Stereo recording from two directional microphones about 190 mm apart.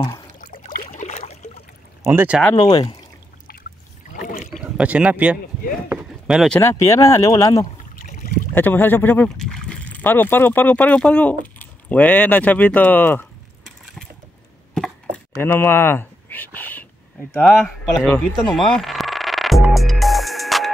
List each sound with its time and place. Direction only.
0.4 s a sound: 45° left (ahead or behind)
2.0 s speech: 10° right (ahead or behind)
2.5 s speech: 25° left (ahead or behind)
4.5 s speech: 5° right (ahead or behind)
5.9 s a sound: 5° right (ahead or behind)
6.6 s speech: 15° left (ahead or behind)
7.9 s boat: 45° left (ahead or behind)
8.5 s speech: 10° left (ahead or behind)
14.7 s a sound: 5° left (ahead or behind)
17.4 s speech: centre (ahead or behind)
18.4 s music: centre (ahead or behind)